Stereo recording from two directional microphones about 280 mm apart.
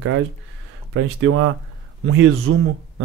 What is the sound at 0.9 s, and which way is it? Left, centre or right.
A man's voice, right.